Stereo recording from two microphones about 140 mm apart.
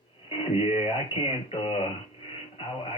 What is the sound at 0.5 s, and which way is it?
Speech, 45° left (ahead or behind).